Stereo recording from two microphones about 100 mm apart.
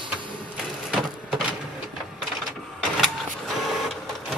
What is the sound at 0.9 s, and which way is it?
Vehicle, 10° right (ahead or behind).